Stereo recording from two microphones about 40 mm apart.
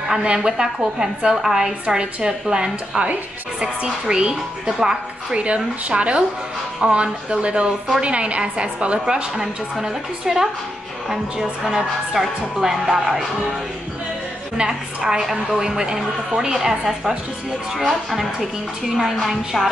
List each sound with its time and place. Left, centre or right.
0.1 s a woman's voice: centre
5.4 s a woman's voice: right
9.0 s a woman's voice: centre
14.6 s a woman's voice: centre
17.7 s a woman's voice: centre